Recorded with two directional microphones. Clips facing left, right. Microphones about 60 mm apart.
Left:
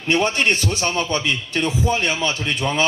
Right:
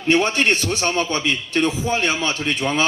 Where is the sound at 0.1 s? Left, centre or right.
Right.